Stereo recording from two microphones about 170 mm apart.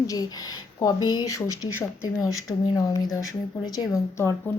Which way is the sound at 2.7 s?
20° left (ahead or behind).